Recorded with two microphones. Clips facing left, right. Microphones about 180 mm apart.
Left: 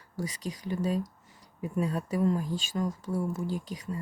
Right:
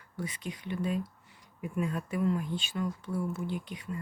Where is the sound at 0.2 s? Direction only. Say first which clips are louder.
Left 3 dB; 40° left (ahead or behind).